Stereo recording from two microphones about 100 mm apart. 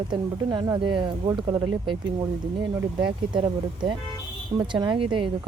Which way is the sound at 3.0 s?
55° right (ahead or behind).